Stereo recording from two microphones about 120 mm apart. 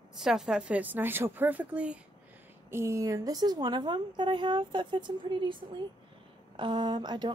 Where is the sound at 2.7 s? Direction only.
25° right (ahead or behind).